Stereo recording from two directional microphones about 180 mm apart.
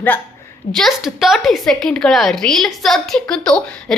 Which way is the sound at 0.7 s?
Centre (ahead or behind).